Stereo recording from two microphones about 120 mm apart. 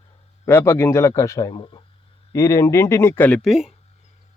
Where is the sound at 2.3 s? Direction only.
25° left (ahead or behind).